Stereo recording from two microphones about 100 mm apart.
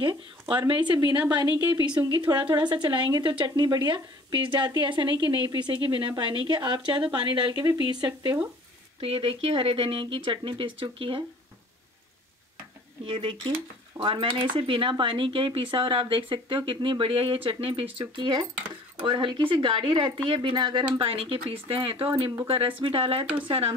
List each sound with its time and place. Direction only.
0.0 s speech: 50° right (ahead or behind)
7.8 s speech: 45° right (ahead or behind)
9.0 s speech: 70° right (ahead or behind)
13.0 s speech: 60° right (ahead or behind)
17.9 s speech: 55° right (ahead or behind)
20.5 s speech: 50° right (ahead or behind)
21.1 s speech: 70° right (ahead or behind)